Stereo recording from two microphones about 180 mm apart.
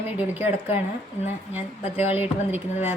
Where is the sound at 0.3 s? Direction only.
10° right (ahead or behind).